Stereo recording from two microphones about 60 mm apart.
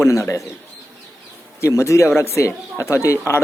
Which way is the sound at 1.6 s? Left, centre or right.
Left.